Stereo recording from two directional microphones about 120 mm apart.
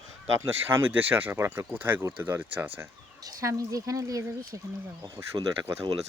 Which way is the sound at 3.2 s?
30° right (ahead or behind).